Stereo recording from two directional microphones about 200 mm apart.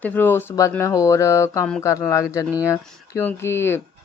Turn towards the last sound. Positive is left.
turn(degrees=10)  # may be behind; listen again after turning